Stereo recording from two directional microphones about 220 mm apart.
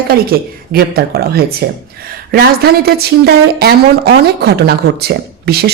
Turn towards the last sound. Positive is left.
turn(degrees=-45)  # may be behind; listen again after turning